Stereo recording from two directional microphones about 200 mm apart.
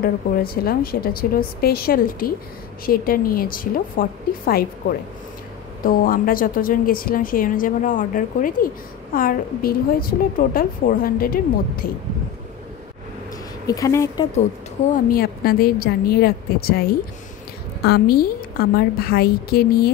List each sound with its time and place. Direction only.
0.0 s a woman's voice: 50° left (ahead or behind)
13.7 s speech: 15° left (ahead or behind)
15.0 s a woman's voice: 50° left (ahead or behind)
17.8 s a woman's voice: 50° left (ahead or behind)